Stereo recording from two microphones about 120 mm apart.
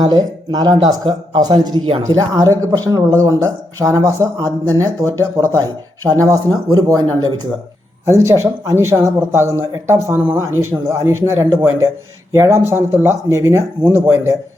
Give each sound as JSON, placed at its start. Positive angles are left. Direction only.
{"t": 0.0, "sound": "speech", "side_deg": -35}
{"t": 8.0, "sound": "speech", "side_deg": -25}